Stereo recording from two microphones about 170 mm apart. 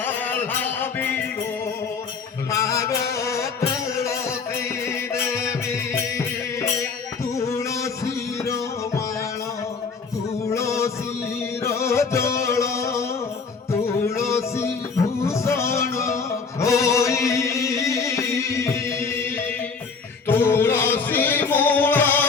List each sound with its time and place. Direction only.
0.0 s music: 10° left (ahead or behind)
2.5 s music: 15° left (ahead or behind)
10.5 s music: 15° left (ahead or behind)